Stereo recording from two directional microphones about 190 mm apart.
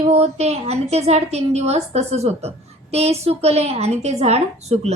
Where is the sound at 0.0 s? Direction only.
35° right (ahead or behind).